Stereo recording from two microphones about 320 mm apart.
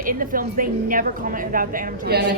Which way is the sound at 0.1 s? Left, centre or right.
Right.